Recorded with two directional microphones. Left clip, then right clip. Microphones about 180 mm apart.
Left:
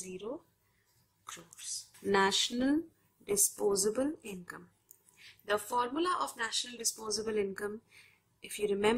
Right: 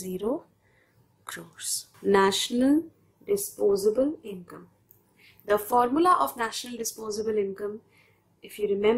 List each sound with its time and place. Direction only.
2.0 s speech: 15° left (ahead or behind)
3.3 s speech: 30° left (ahead or behind)
5.4 s speech: 5° left (ahead or behind)
7.0 s speech: 20° left (ahead or behind)